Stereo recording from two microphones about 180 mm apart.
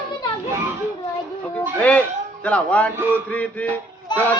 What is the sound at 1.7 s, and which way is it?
A child's voice, 5° left (ahead or behind).